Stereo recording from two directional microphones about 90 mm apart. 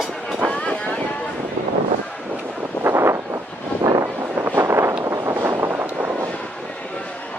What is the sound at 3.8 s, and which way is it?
Vehicle, 45° right (ahead or behind).